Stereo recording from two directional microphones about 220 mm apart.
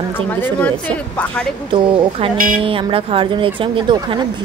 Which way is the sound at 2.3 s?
40° right (ahead or behind).